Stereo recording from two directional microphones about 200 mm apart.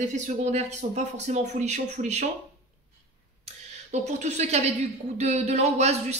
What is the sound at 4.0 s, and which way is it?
Speech, 35° right (ahead or behind).